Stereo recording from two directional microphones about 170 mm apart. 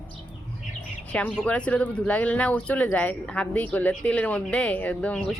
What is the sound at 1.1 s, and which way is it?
Speech, 5° left (ahead or behind).